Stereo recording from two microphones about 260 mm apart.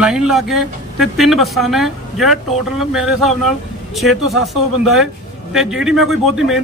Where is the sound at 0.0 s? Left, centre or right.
Centre.